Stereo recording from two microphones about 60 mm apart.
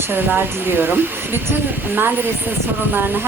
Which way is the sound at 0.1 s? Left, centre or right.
Right.